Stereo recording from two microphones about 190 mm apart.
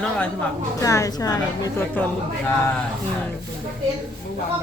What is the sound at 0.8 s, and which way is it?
Speech, 15° left (ahead or behind).